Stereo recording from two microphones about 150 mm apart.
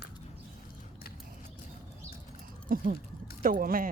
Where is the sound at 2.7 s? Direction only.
65° right (ahead or behind).